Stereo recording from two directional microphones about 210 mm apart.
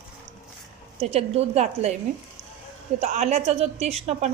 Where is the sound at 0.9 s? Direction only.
30° right (ahead or behind).